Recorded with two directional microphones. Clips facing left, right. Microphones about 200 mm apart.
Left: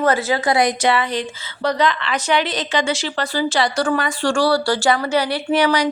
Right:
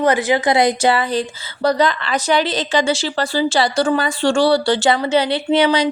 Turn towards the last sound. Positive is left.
turn(degrees=-25)  # may be behind; listen again after turning